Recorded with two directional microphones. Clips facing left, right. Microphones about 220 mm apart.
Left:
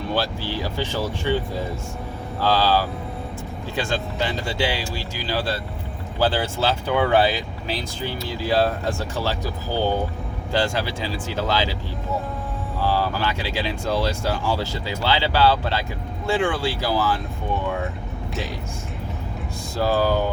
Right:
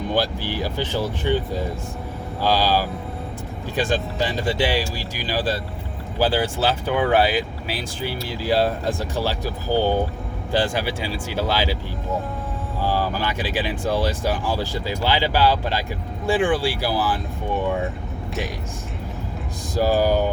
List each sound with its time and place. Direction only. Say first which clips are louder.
0.1 s speech: right 1 dB; 15° right (ahead or behind)
2.4 s speech: even; 15° right (ahead or behind)
10.5 s speech: right 1 dB; 15° right (ahead or behind)
12.8 s speech: left 1 dB; 15° right (ahead or behind)
19.7 s speech: right 2 dB; 15° right (ahead or behind)